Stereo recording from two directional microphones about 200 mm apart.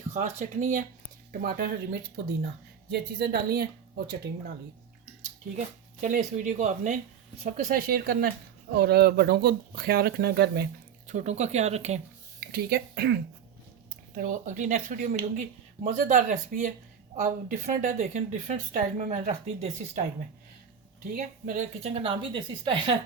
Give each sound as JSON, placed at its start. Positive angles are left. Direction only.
{"t": 0.1, "sound": "speech", "side_deg": -35}
{"t": 5.5, "sound": "speech", "side_deg": -40}
{"t": 11.1, "sound": "speech", "side_deg": -35}
{"t": 12.5, "sound": "speech", "side_deg": -50}
{"t": 14.2, "sound": "speech", "side_deg": -40}
{"t": 21.1, "sound": "speech", "side_deg": -40}